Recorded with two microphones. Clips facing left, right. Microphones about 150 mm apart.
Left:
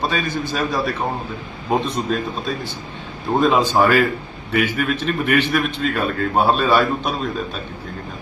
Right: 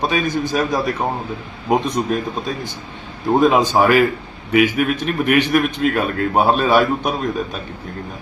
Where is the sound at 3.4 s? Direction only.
15° right (ahead or behind).